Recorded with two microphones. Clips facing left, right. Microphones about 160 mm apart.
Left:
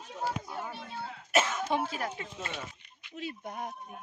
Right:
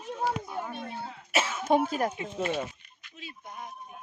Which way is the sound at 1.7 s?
45° right (ahead or behind).